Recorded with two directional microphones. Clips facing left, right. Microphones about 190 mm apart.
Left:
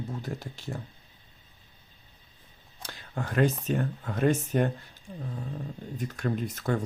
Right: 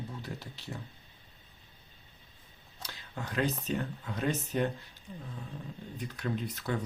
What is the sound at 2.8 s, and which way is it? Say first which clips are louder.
Speech: left 6 dB; 50° left (ahead or behind).